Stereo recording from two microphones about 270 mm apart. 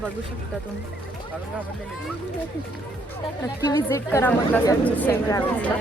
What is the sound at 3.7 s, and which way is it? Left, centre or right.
A woman's voice, centre.